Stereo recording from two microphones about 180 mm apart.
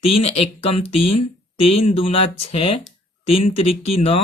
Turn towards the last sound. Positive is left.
turn(degrees=35)  # may be behind; listen again after turning